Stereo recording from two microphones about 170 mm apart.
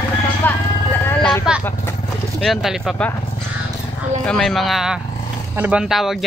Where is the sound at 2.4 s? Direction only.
Centre (ahead or behind).